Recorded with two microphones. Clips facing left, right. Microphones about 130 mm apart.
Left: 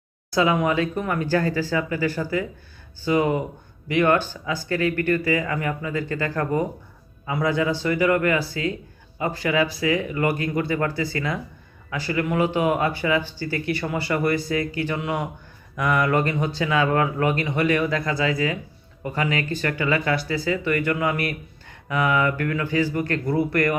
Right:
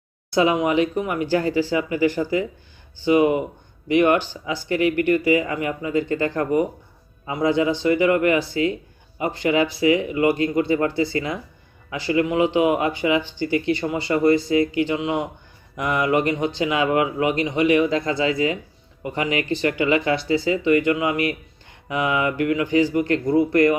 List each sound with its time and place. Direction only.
0.3 s speech: 20° right (ahead or behind)